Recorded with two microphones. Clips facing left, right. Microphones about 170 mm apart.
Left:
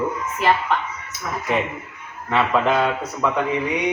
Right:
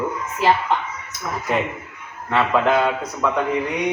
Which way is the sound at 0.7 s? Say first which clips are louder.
Right 1 dB; 20° right (ahead or behind).